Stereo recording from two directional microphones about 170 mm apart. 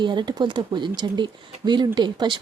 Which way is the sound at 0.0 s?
25° right (ahead or behind).